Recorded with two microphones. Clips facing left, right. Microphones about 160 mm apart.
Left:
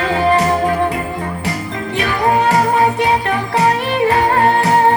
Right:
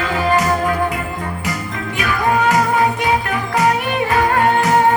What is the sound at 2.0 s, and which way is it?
Music, 30° left (ahead or behind).